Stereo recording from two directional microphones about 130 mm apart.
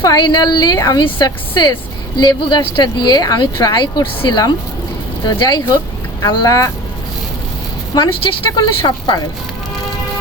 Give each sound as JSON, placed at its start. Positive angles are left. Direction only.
{"t": 0.0, "sound": "speech", "side_deg": 30}
{"t": 7.9, "sound": "speech", "side_deg": 35}